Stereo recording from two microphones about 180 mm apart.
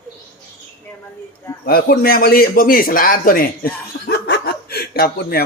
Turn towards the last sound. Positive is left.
turn(degrees=60)  # may be behind; listen again after turning